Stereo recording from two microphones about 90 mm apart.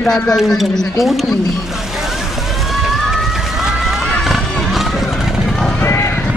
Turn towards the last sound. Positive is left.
turn(degrees=30)  # may be behind; listen again after turning